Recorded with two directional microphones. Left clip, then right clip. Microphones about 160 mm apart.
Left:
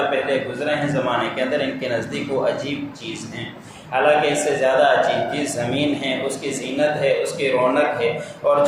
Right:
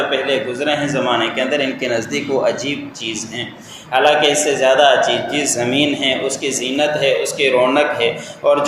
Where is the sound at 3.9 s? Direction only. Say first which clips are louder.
Right 4 dB; 30° right (ahead or behind).